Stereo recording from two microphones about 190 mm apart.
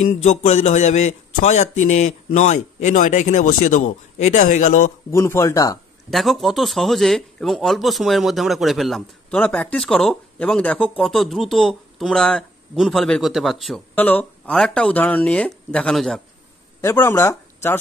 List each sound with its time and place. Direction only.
0.0 s speech: 40° left (ahead or behind)
5.1 s speech: 15° left (ahead or behind)
6.0 s a man's voice: centre (ahead or behind)
16.8 s speech: 15° left (ahead or behind)